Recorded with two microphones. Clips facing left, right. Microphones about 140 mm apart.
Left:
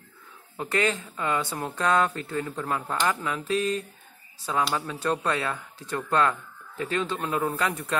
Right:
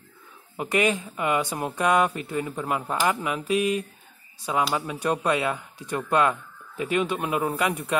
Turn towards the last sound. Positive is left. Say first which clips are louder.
# right 2 dB
turn(degrees=-15)  # may be behind; listen again after turning